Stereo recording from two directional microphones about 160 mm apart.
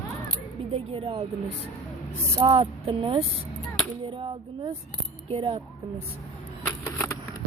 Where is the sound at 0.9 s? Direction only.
40° right (ahead or behind).